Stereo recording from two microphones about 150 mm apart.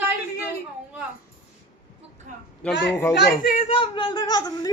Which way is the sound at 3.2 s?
65° left (ahead or behind).